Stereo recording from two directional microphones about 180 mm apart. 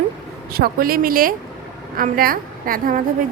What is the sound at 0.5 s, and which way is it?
A woman's voice, 55° right (ahead or behind).